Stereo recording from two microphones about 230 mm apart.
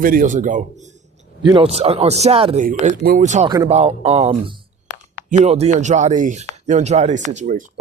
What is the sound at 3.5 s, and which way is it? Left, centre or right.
A man's voice, right.